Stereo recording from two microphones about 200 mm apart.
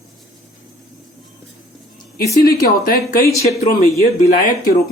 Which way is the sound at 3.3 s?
30° left (ahead or behind).